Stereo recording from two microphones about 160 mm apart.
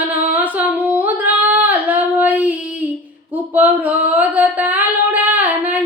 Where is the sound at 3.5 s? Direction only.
10° right (ahead or behind).